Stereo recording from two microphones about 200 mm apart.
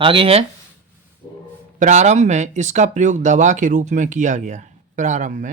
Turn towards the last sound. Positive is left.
turn(degrees=-40)  # may be behind; listen again after turning